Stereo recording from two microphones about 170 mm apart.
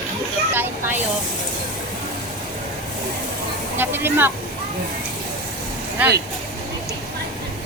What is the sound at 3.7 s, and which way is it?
Speech, 10° right (ahead or behind).